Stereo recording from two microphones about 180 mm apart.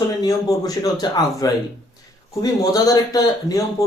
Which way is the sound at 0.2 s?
20° left (ahead or behind).